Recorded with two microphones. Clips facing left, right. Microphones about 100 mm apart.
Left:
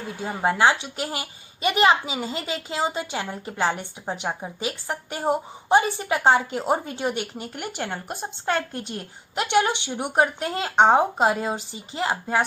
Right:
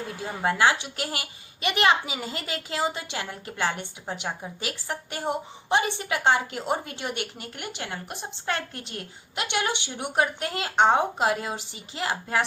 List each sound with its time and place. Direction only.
0.2 s a child's voice: 25° left (ahead or behind)
9.3 s speech: 35° left (ahead or behind)